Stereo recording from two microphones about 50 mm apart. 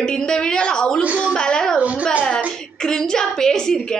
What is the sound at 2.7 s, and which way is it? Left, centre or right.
A woman's voice, centre.